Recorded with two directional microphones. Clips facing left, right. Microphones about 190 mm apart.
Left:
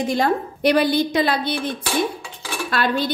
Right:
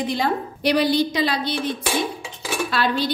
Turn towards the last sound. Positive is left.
turn(degrees=50)  # may be behind; listen again after turning